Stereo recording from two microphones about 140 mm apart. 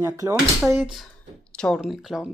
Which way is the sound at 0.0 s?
20° right (ahead or behind).